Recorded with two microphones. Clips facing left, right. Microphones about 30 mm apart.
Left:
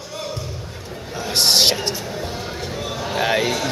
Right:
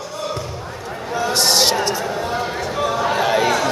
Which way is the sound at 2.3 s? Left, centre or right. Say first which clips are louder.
Right 7 dB; right.